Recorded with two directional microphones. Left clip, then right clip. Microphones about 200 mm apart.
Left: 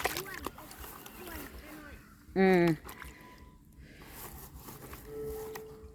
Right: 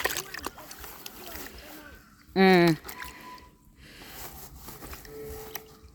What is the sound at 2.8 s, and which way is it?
Music, 35° right (ahead or behind).